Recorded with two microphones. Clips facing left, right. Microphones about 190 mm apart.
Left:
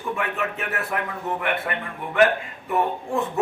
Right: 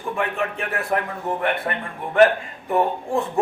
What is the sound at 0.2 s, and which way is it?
A man's voice, 35° right (ahead or behind).